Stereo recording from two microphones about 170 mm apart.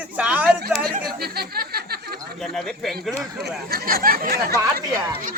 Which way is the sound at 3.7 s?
60° right (ahead or behind).